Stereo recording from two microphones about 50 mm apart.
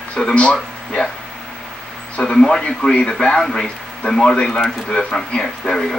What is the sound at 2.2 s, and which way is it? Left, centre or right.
Speech, centre.